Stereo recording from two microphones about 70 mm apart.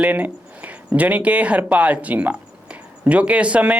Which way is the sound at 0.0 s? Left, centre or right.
Right.